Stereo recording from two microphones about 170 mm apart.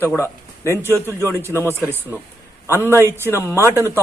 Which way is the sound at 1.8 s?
15° right (ahead or behind).